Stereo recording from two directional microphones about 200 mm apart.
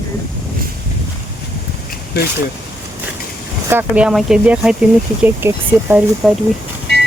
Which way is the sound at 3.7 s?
10° right (ahead or behind).